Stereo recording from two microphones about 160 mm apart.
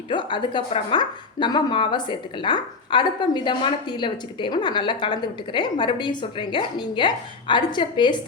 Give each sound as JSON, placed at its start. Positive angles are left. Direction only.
{"t": 0.1, "sound": "speech", "side_deg": 30}